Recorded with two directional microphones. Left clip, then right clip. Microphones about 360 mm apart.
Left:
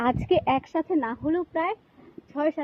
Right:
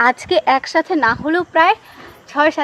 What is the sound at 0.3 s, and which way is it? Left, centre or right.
Speech, centre.